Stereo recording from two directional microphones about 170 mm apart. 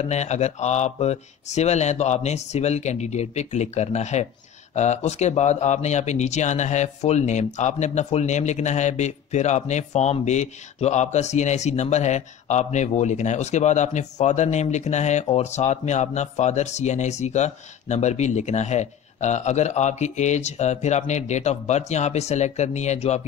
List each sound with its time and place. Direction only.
0.0 s speech: 40° left (ahead or behind)